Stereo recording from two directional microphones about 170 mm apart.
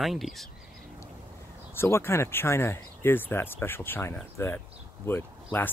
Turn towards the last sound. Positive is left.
turn(degrees=15)  # may be behind; listen again after turning